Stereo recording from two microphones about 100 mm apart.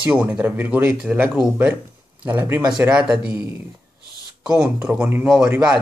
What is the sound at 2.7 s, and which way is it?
Speech, 10° right (ahead or behind).